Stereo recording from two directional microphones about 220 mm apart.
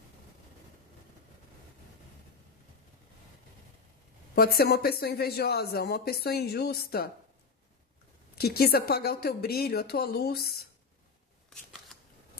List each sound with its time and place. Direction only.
4.6 s speech: 45° left (ahead or behind)
8.4 s speech: 45° left (ahead or behind)